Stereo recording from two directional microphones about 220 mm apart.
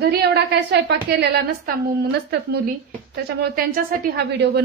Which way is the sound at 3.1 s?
45° right (ahead or behind).